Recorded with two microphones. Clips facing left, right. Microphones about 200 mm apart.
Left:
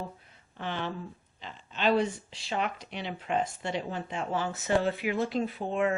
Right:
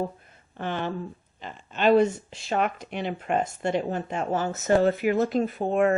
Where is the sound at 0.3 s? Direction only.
50° right (ahead or behind).